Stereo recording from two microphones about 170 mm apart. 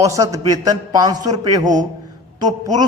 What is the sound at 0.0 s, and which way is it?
A man's voice, 20° right (ahead or behind).